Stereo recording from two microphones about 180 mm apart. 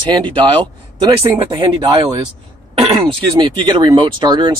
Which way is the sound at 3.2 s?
25° right (ahead or behind).